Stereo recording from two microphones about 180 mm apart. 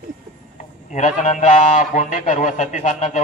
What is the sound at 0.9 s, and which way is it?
A man's voice, 40° left (ahead or behind).